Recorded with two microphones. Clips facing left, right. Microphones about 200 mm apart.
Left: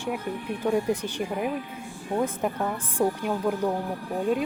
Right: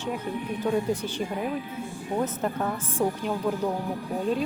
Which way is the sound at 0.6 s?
10° left (ahead or behind).